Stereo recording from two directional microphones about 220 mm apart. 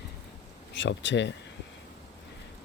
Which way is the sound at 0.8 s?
55° left (ahead or behind).